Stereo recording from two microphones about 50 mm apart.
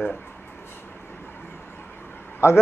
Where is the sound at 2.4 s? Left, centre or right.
Left.